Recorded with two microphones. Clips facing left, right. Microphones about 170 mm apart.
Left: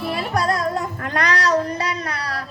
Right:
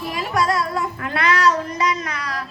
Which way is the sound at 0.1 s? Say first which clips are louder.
Right 1 dB; 40° left (ahead or behind).